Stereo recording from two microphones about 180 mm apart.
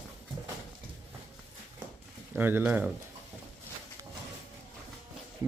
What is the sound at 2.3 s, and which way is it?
Speech, 10° right (ahead or behind).